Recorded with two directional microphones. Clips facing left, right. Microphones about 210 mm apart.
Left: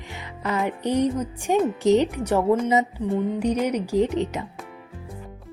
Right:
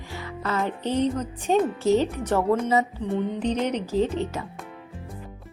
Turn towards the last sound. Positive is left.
turn(degrees=15)  # may be behind; listen again after turning